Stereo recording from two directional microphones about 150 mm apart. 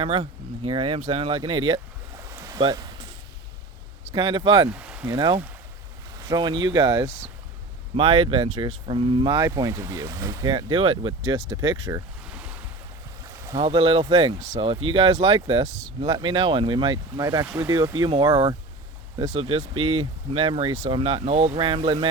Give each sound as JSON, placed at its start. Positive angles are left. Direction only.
{"t": 0.0, "sound": "speech", "side_deg": -40}
{"t": 2.3, "sound": "a sound", "side_deg": -25}
{"t": 4.1, "sound": "speech", "side_deg": -30}
{"t": 4.7, "sound": "speech", "side_deg": -5}
{"t": 5.1, "sound": "speech", "side_deg": -30}
{"t": 7.0, "sound": "speech", "side_deg": -10}
{"t": 7.9, "sound": "speech", "side_deg": -35}
{"t": 12.2, "sound": "boat", "side_deg": -5}
{"t": 13.2, "sound": "boat", "side_deg": -20}
{"t": 13.6, "sound": "speech", "side_deg": -40}
{"t": 14.3, "sound": "speech", "side_deg": -50}
{"t": 14.6, "sound": "speech", "side_deg": -35}
{"t": 16.1, "sound": "speech", "side_deg": -35}
{"t": 19.3, "sound": "speech", "side_deg": -40}